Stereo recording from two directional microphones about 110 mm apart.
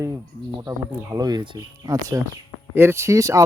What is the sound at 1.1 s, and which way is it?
Speech, 40° right (ahead or behind).